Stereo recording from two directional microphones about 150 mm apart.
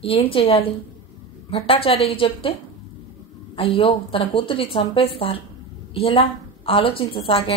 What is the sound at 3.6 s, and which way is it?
A woman's voice, 40° left (ahead or behind).